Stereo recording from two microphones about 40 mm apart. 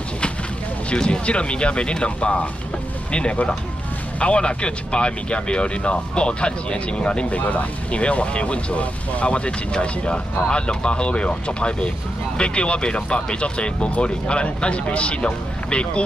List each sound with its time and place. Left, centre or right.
0.9 s speech: left
7.3 s speech: left